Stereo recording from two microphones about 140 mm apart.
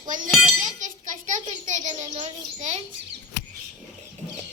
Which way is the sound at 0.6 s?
60° right (ahead or behind).